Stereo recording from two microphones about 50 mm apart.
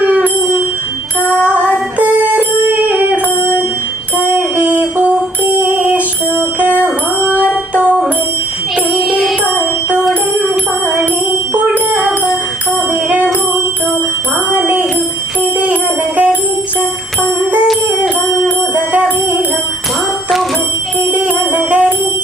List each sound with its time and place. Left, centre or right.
2.0 s music: right
5.5 s a sound: right
6.6 s music: right
10.0 s music: centre
12.9 s music: right
14.5 s jingle bell: right
15.5 s music: right
18.9 s music: right
21.1 s music: right